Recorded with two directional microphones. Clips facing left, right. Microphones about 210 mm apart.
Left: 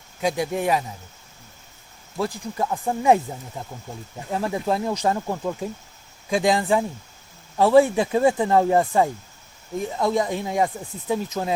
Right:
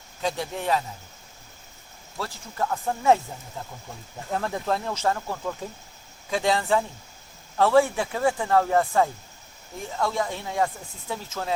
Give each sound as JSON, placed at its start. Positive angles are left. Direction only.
{"t": 0.2, "sound": "speech", "side_deg": 15}
{"t": 2.1, "sound": "speech", "side_deg": 15}
{"t": 4.3, "sound": "speech", "side_deg": 10}